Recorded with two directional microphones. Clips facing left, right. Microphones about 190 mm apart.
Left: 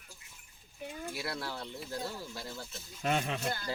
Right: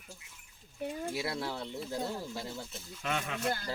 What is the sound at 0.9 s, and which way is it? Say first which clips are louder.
Speech: right 3 dB; 25° right (ahead or behind).